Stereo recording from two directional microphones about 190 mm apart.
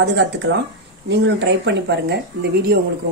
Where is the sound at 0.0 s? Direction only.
65° right (ahead or behind).